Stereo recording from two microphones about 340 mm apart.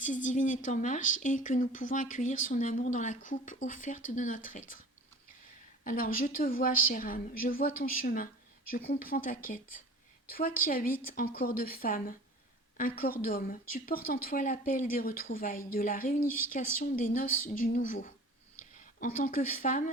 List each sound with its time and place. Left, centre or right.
0.0 s speech: left
5.8 s speech: left